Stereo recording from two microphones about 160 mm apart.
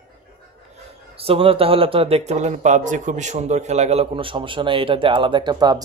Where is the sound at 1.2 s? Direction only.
35° right (ahead or behind).